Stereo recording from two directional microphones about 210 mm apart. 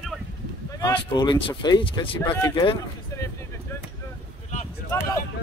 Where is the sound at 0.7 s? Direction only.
20° left (ahead or behind).